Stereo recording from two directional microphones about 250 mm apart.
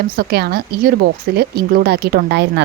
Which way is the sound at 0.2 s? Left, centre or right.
Right.